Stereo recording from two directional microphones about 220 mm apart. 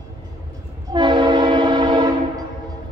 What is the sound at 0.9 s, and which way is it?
Train, 20° right (ahead or behind).